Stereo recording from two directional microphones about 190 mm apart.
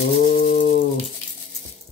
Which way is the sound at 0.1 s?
55° left (ahead or behind).